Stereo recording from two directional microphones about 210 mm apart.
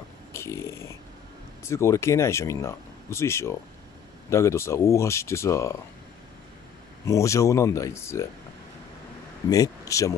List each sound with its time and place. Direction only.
0.3 s a sound: 15° left (ahead or behind)
1.6 s speech: 15° left (ahead or behind)
7.1 s speech: 15° left (ahead or behind)
9.5 s speech: 15° left (ahead or behind)